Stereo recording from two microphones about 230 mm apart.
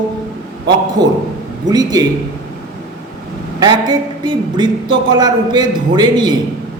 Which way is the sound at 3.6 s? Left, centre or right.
Centre.